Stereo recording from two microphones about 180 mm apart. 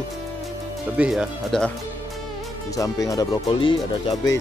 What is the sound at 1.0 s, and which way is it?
Speech, 5° right (ahead or behind).